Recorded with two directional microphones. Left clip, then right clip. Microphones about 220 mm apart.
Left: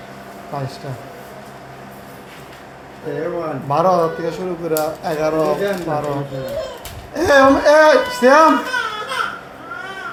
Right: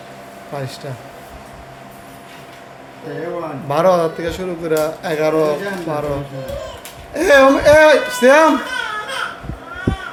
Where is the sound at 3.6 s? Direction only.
30° right (ahead or behind).